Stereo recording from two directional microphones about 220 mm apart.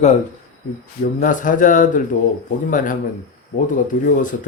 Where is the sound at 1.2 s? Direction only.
35° left (ahead or behind).